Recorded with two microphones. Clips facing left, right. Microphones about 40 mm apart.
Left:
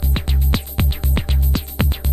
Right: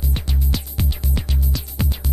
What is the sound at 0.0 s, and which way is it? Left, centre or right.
Music, left.